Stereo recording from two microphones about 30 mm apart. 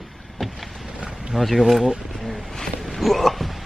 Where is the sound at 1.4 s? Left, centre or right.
Centre.